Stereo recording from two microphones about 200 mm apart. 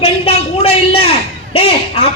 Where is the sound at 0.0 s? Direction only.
30° left (ahead or behind).